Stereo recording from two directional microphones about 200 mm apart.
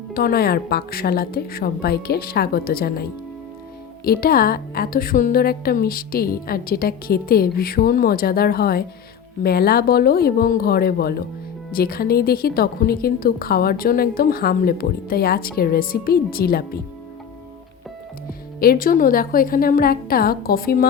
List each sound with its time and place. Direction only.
0.1 s speech: 50° left (ahead or behind)
18.3 s speech: 45° left (ahead or behind)